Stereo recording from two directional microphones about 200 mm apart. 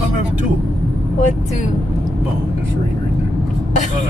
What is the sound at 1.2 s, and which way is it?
Speech, 35° left (ahead or behind).